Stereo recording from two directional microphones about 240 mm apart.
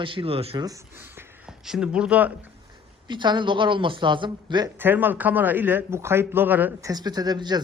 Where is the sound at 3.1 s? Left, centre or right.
Centre.